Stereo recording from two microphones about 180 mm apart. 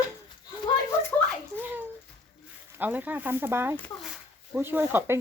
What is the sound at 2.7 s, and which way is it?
Speech, 10° right (ahead or behind).